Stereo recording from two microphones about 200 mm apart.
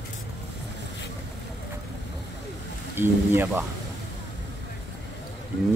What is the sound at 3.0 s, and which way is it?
Speech, 10° right (ahead or behind).